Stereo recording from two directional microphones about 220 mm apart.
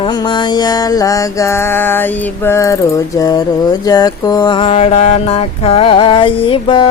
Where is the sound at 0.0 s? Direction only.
20° left (ahead or behind).